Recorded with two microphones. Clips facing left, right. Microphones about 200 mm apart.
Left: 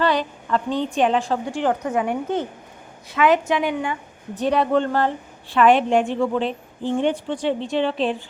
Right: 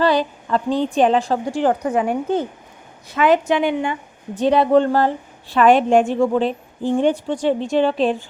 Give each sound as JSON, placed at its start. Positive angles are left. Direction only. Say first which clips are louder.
{"t": 0.0, "sound": "a woman's voice", "louder": "right 4 dB", "side_deg": -35}